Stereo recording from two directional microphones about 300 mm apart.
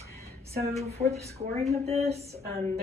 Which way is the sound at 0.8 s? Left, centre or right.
Right.